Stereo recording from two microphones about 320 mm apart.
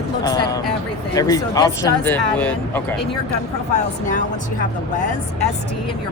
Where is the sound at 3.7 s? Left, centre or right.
Left.